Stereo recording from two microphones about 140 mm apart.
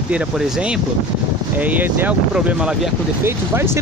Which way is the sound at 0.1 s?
5° right (ahead or behind).